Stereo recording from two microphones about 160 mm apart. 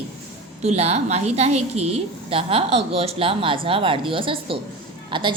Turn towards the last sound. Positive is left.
turn(degrees=-30)  # may be behind; listen again after turning